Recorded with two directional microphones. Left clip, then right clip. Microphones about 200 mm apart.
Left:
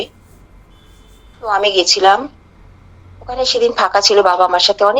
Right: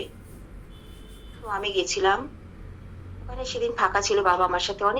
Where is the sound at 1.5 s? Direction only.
55° left (ahead or behind).